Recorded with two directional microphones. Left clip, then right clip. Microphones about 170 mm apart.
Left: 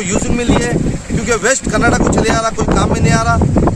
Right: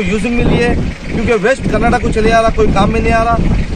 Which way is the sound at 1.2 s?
20° left (ahead or behind).